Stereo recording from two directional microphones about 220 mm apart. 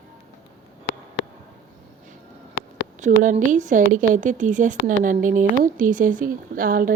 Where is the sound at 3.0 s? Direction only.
35° right (ahead or behind).